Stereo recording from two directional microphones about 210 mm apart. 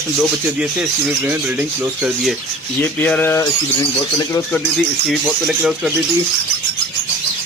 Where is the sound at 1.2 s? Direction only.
5° right (ahead or behind).